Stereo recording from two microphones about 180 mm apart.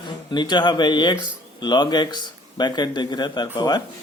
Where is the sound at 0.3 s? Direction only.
25° left (ahead or behind).